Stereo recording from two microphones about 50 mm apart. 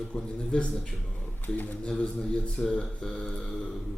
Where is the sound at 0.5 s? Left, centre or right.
Centre.